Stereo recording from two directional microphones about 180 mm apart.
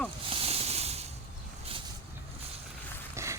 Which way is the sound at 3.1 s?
15° right (ahead or behind).